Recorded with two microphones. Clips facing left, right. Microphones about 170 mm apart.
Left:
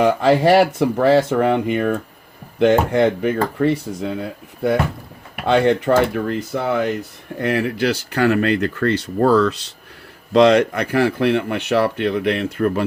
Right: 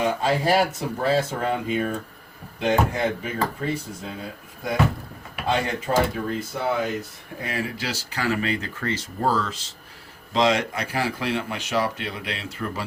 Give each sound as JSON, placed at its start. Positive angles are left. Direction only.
{"t": 0.0, "sound": "speech", "side_deg": 70}